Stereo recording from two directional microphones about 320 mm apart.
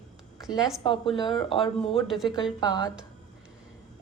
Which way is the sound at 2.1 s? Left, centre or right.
Centre.